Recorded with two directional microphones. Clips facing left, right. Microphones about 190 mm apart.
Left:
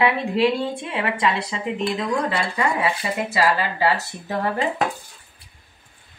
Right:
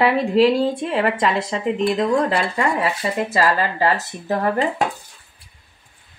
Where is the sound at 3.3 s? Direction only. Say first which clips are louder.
Right 1 dB; 45° right (ahead or behind).